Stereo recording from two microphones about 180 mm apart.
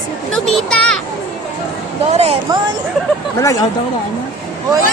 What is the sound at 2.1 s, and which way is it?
Speech, 35° right (ahead or behind).